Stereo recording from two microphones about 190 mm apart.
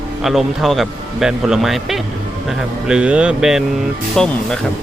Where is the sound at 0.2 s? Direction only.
Centre (ahead or behind).